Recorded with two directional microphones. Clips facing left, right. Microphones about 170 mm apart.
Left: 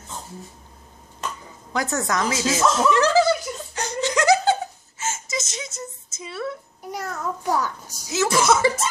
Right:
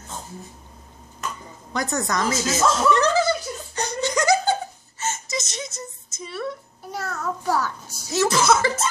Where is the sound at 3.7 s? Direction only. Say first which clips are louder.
Left 1 dB; centre (ahead or behind).